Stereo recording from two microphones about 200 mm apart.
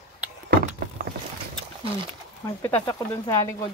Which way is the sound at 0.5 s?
50° right (ahead or behind).